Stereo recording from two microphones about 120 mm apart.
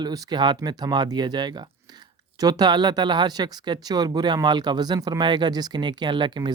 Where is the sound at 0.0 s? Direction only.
35° right (ahead or behind).